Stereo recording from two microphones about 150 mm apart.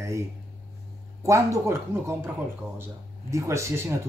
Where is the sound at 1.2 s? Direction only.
20° right (ahead or behind).